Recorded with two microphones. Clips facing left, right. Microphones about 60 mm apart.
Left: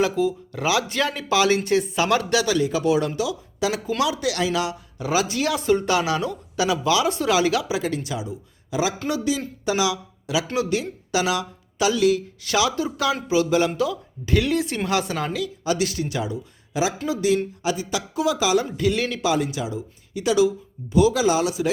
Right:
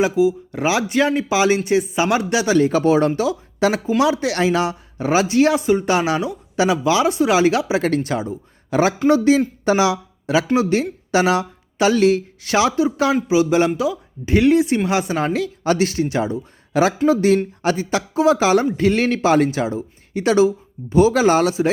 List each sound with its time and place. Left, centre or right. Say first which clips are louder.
0.0 s speech: right 5 dB; centre
0.5 s speech: right 4 dB; right
2.6 s speech: right 6 dB; right
3.8 s speech: right 5 dB; right
4.1 s speech: right 5 dB; right
5.6 s speech: right 2 dB; centre
5.9 s speech: right 3 dB; right
7.8 s speech: right 7 dB; right
9.0 s speech: right 10 dB; right
16.7 s speech: right 8 dB; right